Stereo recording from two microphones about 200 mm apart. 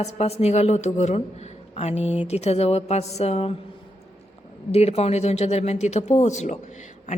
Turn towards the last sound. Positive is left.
turn(degrees=35)  # may be behind; listen again after turning